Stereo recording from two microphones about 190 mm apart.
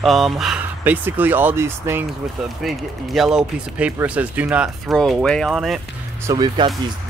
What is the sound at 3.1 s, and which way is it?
Speech, 5° right (ahead or behind).